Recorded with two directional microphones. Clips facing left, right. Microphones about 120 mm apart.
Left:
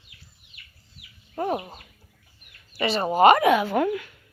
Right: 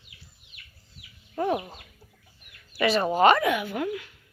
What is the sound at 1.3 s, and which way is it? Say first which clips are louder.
Speech: even; 30° left (ahead or behind).